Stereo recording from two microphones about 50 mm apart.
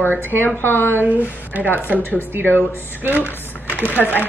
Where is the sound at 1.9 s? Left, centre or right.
Left.